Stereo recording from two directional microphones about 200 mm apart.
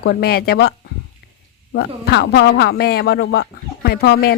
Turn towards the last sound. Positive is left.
turn(degrees=50)  # may be behind; listen again after turning